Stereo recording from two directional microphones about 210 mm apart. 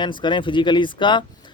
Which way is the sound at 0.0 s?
20° left (ahead or behind).